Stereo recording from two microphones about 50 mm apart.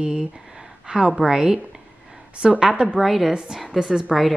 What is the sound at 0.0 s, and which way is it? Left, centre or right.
A woman's voice, centre.